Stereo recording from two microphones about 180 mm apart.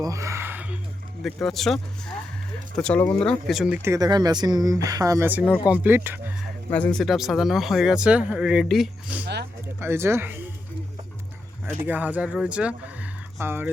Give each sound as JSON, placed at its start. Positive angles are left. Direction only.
{"t": 0.0, "sound": "a sound", "side_deg": -15}
{"t": 1.2, "sound": "speech", "side_deg": 0}
{"t": 3.8, "sound": "speech", "side_deg": -20}
{"t": 6.7, "sound": "speech", "side_deg": 10}
{"t": 9.2, "sound": "speech", "side_deg": -65}
{"t": 9.8, "sound": "speech", "side_deg": -15}
{"t": 11.8, "sound": "speech", "side_deg": -10}